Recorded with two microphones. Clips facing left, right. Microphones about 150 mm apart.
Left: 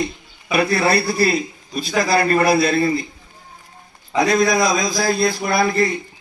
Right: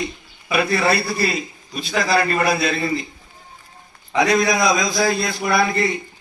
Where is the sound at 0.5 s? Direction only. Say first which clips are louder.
Left 2 dB; 35° left (ahead or behind).